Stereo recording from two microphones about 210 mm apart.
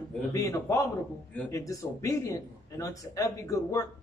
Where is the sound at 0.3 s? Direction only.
15° left (ahead or behind).